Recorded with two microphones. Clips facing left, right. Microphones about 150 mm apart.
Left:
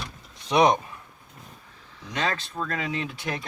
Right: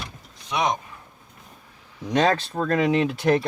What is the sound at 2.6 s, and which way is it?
Speech, 60° right (ahead or behind).